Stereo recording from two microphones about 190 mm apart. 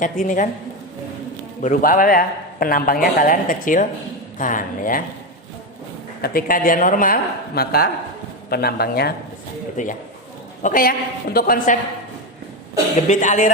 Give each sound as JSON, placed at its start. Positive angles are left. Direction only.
{"t": 0.0, "sound": "a man's voice", "side_deg": 45}
{"t": 1.6, "sound": "a man's voice", "side_deg": 45}
{"t": 6.2, "sound": "a man's voice", "side_deg": 50}
{"t": 9.8, "sound": "a man's voice", "side_deg": 40}
{"t": 13.1, "sound": "speech", "side_deg": 40}